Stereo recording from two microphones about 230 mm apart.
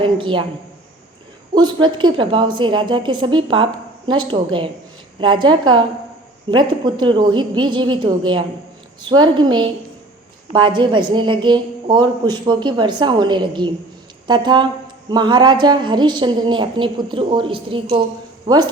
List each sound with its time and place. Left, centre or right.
0.0 s a woman's voice: right
1.5 s a woman's voice: centre